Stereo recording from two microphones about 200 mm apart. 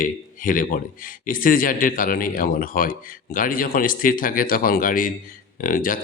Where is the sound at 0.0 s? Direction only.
40° left (ahead or behind).